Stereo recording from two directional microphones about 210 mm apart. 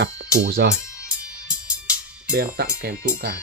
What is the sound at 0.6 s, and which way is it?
Speech, 50° right (ahead or behind).